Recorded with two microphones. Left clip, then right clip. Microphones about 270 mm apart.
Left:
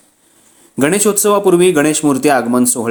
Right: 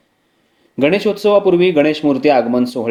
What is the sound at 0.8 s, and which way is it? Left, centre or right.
A man's voice, left.